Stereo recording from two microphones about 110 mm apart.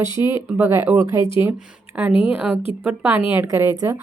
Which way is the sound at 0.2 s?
25° right (ahead or behind).